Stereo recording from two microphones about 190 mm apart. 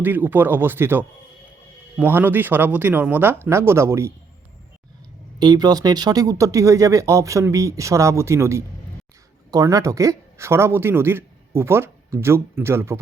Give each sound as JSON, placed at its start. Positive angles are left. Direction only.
{"t": 0.0, "sound": "speech", "side_deg": -10}
{"t": 5.4, "sound": "speech", "side_deg": -20}